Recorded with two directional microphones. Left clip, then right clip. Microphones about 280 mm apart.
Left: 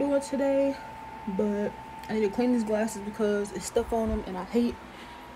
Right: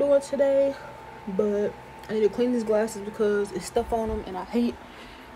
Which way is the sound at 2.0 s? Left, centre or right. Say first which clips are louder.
Right 3 dB; centre.